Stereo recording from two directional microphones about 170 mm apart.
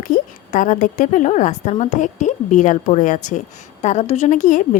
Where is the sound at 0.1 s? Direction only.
50° left (ahead or behind).